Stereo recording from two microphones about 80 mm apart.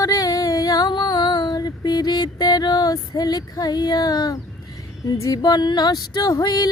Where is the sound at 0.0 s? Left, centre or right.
Left.